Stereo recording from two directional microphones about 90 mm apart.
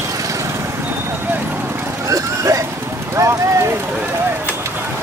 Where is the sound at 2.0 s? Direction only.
35° right (ahead or behind).